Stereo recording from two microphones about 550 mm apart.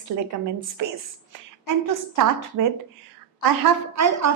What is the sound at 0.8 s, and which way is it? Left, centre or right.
A woman's voice, right.